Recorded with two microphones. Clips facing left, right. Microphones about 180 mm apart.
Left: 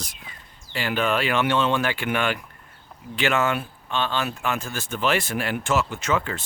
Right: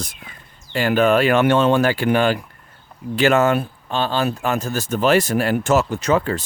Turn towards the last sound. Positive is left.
turn(degrees=-40)  # may be behind; listen again after turning